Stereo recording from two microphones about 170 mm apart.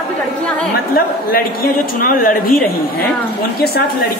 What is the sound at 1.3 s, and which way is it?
Speech, 60° left (ahead or behind).